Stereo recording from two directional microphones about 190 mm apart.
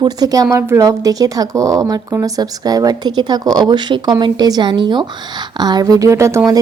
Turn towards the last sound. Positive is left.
turn(degrees=-15)  # may be behind; listen again after turning